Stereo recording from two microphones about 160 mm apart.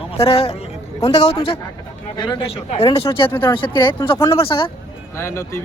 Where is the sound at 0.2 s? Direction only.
40° left (ahead or behind).